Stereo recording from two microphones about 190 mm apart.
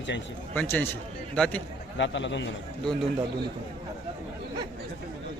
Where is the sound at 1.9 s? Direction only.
70° left (ahead or behind).